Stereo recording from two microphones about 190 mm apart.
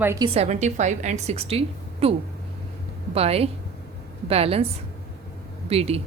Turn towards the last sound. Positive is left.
turn(degrees=-30)  # may be behind; listen again after turning